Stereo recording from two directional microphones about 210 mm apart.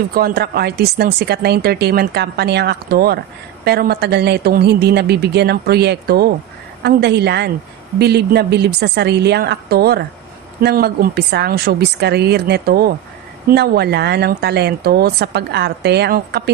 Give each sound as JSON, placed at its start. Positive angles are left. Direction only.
{"t": 0.1, "sound": "speech", "side_deg": -45}